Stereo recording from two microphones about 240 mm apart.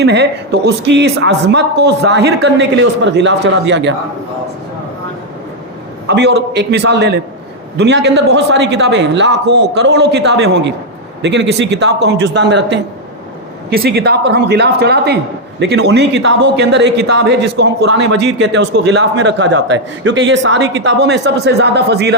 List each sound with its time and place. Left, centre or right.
0.0 s a man's voice: right
6.1 s a man's voice: right